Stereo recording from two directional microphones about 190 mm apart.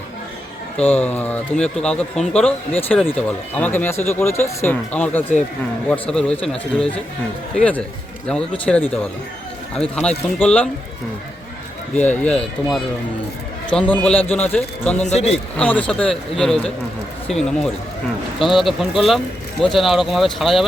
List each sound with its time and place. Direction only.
0.8 s a man's voice: 5° left (ahead or behind)
11.9 s speech: 10° left (ahead or behind)
15.0 s a man's voice: 35° left (ahead or behind)
15.5 s a man's voice: 5° left (ahead or behind)